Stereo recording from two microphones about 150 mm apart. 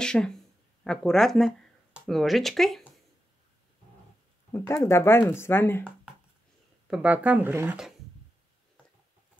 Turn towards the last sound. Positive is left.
turn(degrees=-10)  # may be behind; listen again after turning